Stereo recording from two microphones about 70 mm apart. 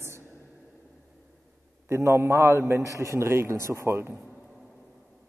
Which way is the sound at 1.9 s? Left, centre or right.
Right.